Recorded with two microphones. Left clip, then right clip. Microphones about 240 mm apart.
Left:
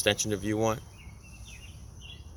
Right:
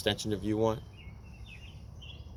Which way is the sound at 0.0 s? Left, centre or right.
Left.